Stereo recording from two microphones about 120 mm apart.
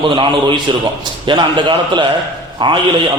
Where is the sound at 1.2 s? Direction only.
40° right (ahead or behind).